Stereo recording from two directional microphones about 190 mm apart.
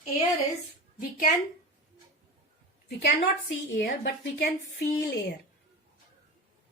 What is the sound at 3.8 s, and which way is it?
A woman's voice, 65° left (ahead or behind).